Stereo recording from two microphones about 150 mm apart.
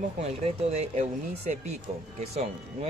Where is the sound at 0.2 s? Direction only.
45° right (ahead or behind).